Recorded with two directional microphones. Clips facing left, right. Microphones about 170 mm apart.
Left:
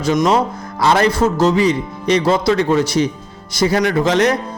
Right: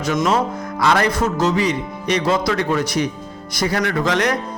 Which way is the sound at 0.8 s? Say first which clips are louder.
Left 4 dB; 30° left (ahead or behind).